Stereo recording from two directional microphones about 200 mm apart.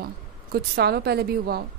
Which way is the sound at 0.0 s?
50° right (ahead or behind).